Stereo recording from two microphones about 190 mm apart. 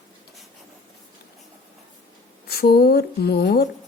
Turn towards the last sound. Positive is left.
turn(degrees=60)  # may be behind; listen again after turning